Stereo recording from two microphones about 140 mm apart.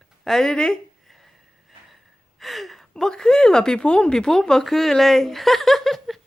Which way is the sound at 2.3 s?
Centre (ahead or behind).